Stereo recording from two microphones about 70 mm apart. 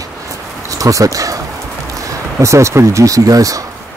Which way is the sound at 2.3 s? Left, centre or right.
Right.